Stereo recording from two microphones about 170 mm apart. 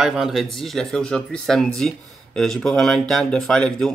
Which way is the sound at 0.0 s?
Centre (ahead or behind).